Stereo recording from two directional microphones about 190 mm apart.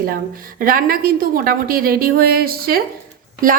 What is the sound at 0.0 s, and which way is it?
A woman's voice, 50° right (ahead or behind).